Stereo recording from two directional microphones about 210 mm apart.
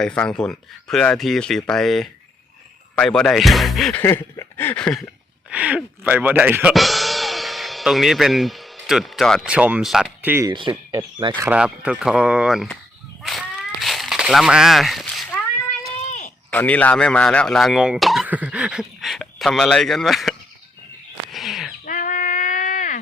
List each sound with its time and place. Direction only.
0.0 s speech: 5° left (ahead or behind)
4.0 s a sound: 10° left (ahead or behind); by 10.5 s 10° right (ahead or behind)
10.9 s speech: 20° right (ahead or behind)
11.4 s speech: 5° right (ahead or behind)
13.2 s a sound: centre (ahead or behind)
16.0 s a sound: 35° left (ahead or behind)
16.5 s speech: 5° left (ahead or behind)
21.2 s bird: centre (ahead or behind)
21.8 s child singing: 40° left (ahead or behind)